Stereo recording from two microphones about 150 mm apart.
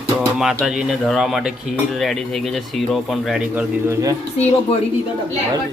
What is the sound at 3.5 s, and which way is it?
Speech, 15° right (ahead or behind).